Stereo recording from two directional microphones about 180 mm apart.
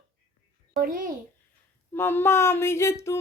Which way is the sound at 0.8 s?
50° right (ahead or behind).